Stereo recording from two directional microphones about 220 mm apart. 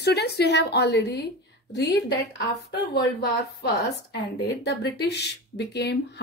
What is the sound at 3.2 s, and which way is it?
Speech, 50° left (ahead or behind).